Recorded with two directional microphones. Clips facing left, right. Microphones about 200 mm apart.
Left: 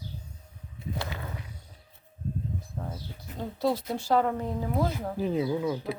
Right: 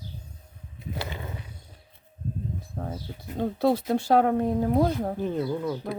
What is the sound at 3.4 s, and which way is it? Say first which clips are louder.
Speech: right 5 dB; 60° right (ahead or behind).